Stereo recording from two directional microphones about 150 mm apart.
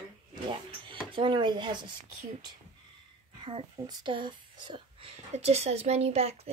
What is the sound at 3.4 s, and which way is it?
Speech, 35° right (ahead or behind).